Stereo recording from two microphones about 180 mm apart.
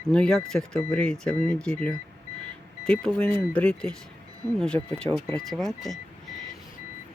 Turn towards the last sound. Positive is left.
turn(degrees=0)  # may be behind; listen again after turning